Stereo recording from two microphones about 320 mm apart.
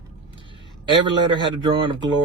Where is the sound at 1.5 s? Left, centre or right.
Centre.